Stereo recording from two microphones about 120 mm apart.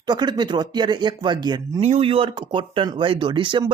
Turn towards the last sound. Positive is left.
turn(degrees=-45)  # may be behind; listen again after turning